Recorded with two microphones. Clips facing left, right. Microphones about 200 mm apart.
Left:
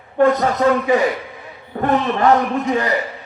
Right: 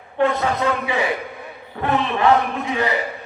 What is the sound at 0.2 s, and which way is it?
A man's voice, 45° left (ahead or behind).